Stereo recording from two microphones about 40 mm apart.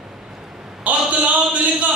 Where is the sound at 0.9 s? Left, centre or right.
Right.